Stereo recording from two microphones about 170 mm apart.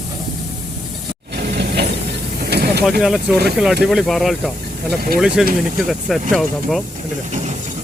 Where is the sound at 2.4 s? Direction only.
70° right (ahead or behind).